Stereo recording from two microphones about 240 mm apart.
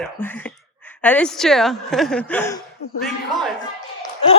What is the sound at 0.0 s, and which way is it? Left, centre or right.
A man's voice, centre.